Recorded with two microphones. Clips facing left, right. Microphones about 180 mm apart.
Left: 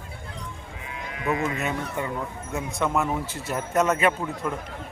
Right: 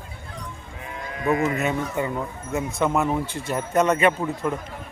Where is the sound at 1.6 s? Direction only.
5° right (ahead or behind).